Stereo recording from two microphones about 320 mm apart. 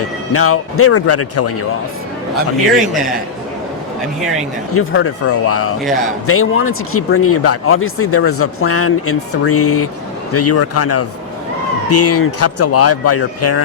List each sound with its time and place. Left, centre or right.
0.3 s speech: left
4.7 s speech: left